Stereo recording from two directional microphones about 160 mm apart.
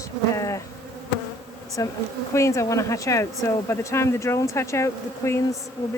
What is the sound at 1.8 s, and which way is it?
Speech, 20° left (ahead or behind).